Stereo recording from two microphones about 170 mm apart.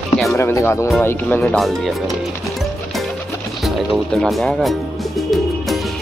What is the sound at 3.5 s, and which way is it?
Speech, centre (ahead or behind).